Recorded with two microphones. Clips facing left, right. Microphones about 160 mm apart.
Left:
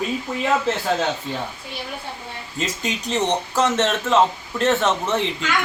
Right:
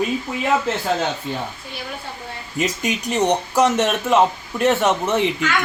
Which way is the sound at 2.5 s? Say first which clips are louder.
Right 4 dB; 15° right (ahead or behind).